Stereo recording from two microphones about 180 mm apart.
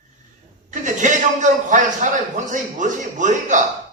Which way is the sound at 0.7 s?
45° right (ahead or behind).